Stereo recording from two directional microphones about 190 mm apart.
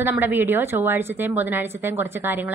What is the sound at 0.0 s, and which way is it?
A woman's voice, 10° right (ahead or behind).